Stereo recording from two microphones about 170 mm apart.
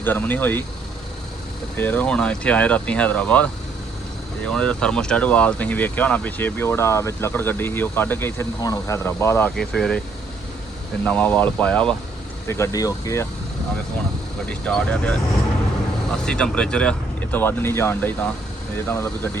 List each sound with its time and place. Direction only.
0.0 s speech: 10° left (ahead or behind)
1.7 s speech: 10° left (ahead or behind)
9.6 s speech: 5° left (ahead or behind)
11.0 s speech: 10° left (ahead or behind)
14.6 s speech: 5° left (ahead or behind)
16.2 s speech: 5° left (ahead or behind)